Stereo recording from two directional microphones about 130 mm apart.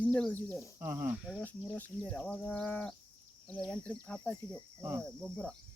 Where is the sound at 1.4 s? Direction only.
15° left (ahead or behind).